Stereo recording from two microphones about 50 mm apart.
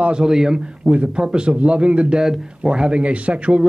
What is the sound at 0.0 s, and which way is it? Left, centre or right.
A man's voice, centre.